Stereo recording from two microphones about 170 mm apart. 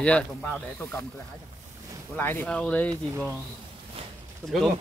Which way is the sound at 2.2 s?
10° left (ahead or behind).